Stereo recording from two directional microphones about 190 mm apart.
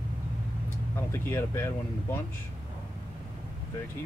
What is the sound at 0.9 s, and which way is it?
Speech, 15° left (ahead or behind).